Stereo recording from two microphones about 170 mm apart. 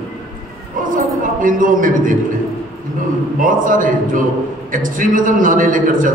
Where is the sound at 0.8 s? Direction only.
50° right (ahead or behind).